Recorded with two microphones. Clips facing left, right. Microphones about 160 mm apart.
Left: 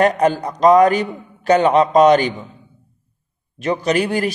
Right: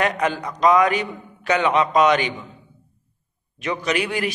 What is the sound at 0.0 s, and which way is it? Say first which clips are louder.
A man's voice: left 7 dB; 40° left (ahead or behind).